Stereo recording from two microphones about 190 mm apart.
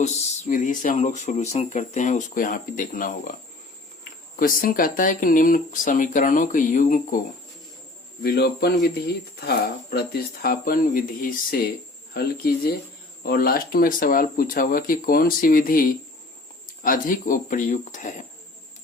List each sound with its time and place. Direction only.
0.0 s speech: 35° left (ahead or behind)
4.4 s speech: 45° left (ahead or behind)
8.2 s speech: 55° left (ahead or behind)
9.9 s speech: 55° left (ahead or behind)